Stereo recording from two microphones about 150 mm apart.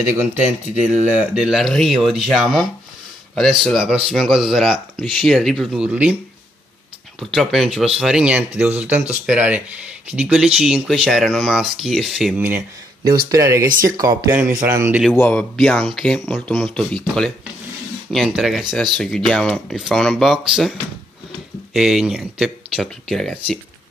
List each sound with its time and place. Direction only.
1.2 s speech: 5° right (ahead or behind)
7.2 s speech: centre (ahead or behind)
13.0 s speech: 90° right
13.3 s speech: 20° right (ahead or behind)
15.1 s speech: 10° left (ahead or behind)